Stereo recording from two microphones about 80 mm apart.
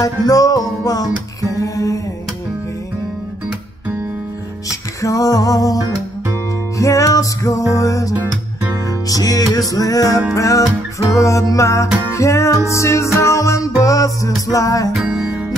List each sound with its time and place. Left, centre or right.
0.2 s music: left
5.0 s music: left
6.8 s music: left
15.1 s music: centre